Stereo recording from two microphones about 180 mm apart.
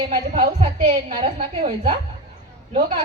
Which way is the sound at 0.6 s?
30° right (ahead or behind).